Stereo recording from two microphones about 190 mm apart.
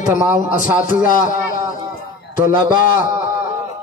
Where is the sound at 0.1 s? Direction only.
45° left (ahead or behind).